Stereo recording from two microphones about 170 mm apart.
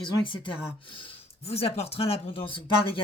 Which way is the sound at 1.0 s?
35° left (ahead or behind).